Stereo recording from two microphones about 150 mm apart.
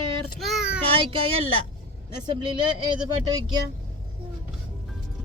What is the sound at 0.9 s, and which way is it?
Speech, 35° right (ahead or behind).